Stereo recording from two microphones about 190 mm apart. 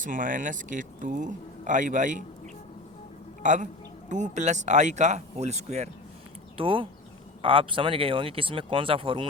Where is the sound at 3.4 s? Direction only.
40° right (ahead or behind).